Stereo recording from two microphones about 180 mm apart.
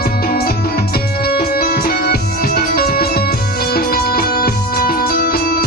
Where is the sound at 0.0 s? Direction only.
55° left (ahead or behind).